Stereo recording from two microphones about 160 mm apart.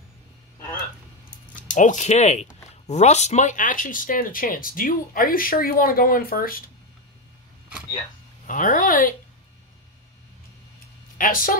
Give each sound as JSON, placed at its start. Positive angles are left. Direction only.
{"t": 1.5, "sound": "speech", "side_deg": 55}
{"t": 8.5, "sound": "speech", "side_deg": 55}
{"t": 11.1, "sound": "speech", "side_deg": 60}